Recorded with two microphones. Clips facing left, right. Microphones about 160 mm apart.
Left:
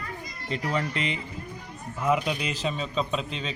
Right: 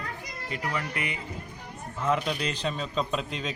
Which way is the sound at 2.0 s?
10° left (ahead or behind).